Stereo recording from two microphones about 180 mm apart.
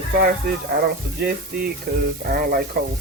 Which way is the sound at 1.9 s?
60° right (ahead or behind).